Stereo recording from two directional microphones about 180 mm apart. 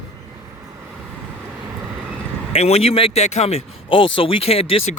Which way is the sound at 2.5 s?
35° left (ahead or behind).